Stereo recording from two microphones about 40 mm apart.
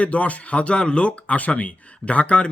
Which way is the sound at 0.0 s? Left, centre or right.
Left.